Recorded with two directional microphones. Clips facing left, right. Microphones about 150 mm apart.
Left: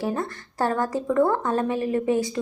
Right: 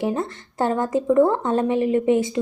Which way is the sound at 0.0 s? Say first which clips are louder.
Right 3 dB; 20° right (ahead or behind).